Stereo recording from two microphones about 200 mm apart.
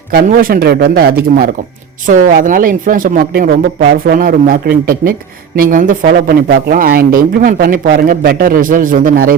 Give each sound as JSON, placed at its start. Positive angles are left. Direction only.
{"t": 0.1, "sound": "speech", "side_deg": -45}